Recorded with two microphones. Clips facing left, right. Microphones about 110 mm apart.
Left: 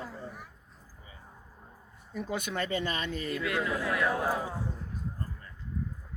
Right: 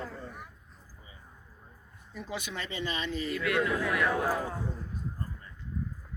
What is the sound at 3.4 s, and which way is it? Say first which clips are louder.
Speech: right 3 dB; 30° left (ahead or behind).